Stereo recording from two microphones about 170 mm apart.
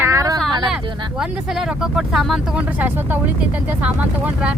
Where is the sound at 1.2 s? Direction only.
5° right (ahead or behind).